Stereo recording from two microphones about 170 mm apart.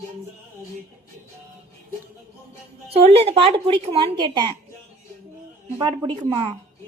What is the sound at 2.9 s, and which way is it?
Speech, 35° right (ahead or behind).